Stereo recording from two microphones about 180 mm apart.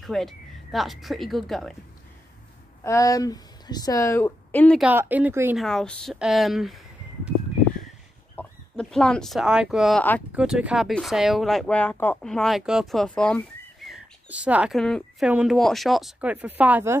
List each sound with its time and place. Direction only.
0.0 s speech: centre (ahead or behind)
2.8 s a woman's voice: 15° left (ahead or behind)
4.8 s speech: 10° right (ahead or behind)
5.6 s speech: centre (ahead or behind)
8.4 s speech: 5° left (ahead or behind); by 17.0 s 10° right (ahead or behind)